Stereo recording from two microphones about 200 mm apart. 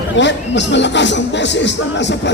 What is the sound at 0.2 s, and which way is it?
Speech, 65° left (ahead or behind).